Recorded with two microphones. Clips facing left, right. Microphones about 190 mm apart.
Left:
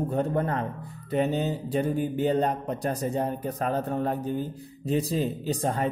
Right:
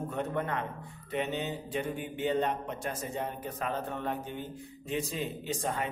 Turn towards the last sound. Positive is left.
turn(degrees=35)  # may be behind; listen again after turning